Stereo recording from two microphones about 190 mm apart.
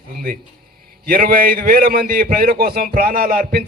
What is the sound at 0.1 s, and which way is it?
A man's voice, 45° right (ahead or behind).